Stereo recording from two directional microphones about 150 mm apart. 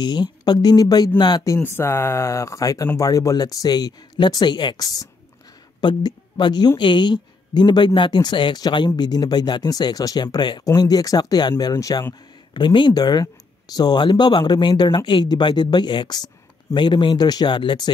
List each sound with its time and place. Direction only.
0.0 s speech: 30° left (ahead or behind)